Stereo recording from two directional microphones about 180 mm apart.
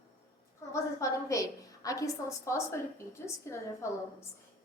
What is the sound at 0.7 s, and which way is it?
A woman's voice, 15° left (ahead or behind).